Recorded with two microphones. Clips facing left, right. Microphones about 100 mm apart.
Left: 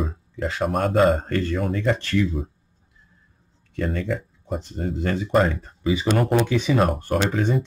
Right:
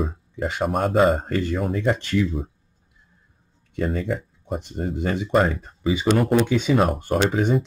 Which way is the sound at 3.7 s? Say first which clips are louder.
Right 1 dB; 5° right (ahead or behind).